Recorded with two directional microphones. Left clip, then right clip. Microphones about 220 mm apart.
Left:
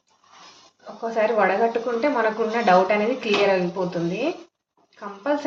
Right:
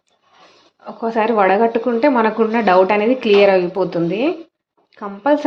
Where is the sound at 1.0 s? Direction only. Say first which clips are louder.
Right 5 dB; 45° right (ahead or behind).